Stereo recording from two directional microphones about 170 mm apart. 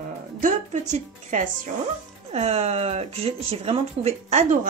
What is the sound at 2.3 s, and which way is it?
Speech, 40° right (ahead or behind).